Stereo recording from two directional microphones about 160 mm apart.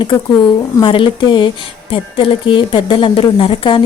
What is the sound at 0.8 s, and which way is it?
Speech, 30° left (ahead or behind).